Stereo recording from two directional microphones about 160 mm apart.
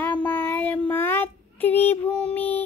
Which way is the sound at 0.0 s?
10° left (ahead or behind).